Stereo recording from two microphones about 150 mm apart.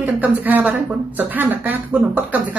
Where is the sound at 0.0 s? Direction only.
10° right (ahead or behind).